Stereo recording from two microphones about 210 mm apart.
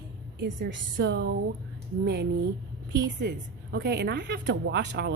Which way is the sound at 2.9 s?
55° right (ahead or behind).